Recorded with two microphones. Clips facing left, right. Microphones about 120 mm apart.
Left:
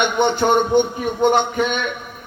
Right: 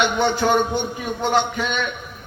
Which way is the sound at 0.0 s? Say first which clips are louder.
Left 2 dB; 55° left (ahead or behind).